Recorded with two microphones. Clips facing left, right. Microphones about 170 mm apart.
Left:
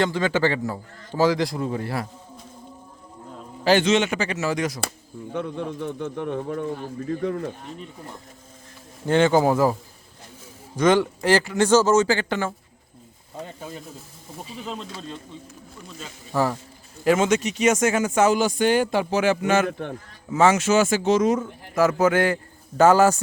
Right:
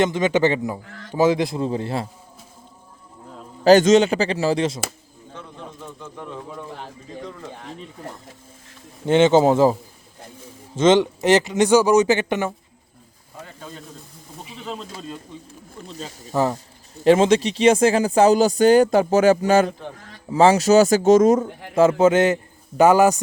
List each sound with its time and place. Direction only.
0.0 s speech: 20° right (ahead or behind)
0.9 s speech: 90° right
1.1 s speech: 20° right (ahead or behind)
3.6 s speech: 40° right (ahead or behind)
5.3 s speech: 65° left (ahead or behind)
9.0 s speech: 20° right (ahead or behind)
10.8 s speech: 20° right (ahead or behind)
14.6 s speech: centre (ahead or behind)
15.9 s speech: 35° right (ahead or behind)
16.3 s speech: 20° right (ahead or behind)
17.0 s speech: 30° right (ahead or behind)
21.8 s a man's voice: 25° right (ahead or behind)